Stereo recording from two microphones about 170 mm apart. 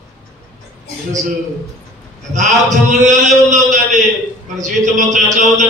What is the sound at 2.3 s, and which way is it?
A man's voice, 45° right (ahead or behind).